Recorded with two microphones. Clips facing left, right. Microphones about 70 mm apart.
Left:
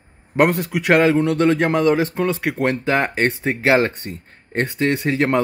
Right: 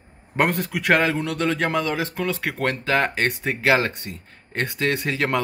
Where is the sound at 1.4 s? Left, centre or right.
Left.